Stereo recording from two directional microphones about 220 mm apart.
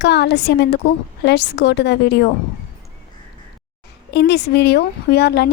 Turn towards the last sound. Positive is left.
turn(degrees=45)  # may be behind; listen again after turning